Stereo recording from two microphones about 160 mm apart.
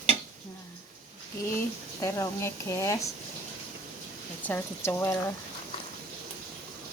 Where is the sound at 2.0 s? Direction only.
20° left (ahead or behind).